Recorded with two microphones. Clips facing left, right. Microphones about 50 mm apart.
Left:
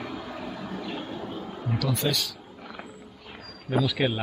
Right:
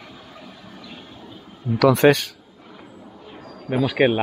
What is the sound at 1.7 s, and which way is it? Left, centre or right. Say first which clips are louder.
Speech: right 14 dB; right.